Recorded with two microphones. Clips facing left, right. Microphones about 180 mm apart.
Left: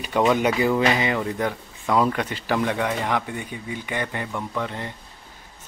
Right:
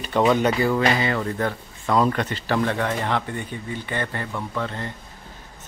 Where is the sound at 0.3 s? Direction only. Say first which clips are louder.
Even; 10° left (ahead or behind).